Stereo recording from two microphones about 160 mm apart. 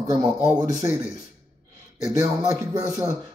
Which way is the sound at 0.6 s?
20° right (ahead or behind).